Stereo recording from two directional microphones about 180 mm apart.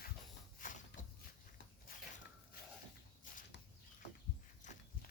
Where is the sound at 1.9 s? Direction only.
55° left (ahead or behind).